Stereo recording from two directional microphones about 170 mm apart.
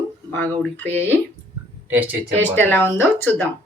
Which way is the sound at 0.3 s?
10° left (ahead or behind).